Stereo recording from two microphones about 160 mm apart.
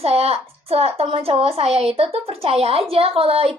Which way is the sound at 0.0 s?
40° right (ahead or behind).